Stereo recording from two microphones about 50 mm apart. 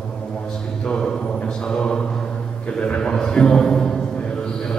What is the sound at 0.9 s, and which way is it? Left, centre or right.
Mantra, centre.